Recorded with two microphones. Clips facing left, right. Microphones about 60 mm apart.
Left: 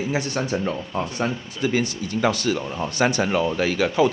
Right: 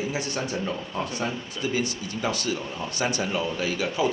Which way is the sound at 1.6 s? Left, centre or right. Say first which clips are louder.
Left 5 dB; left.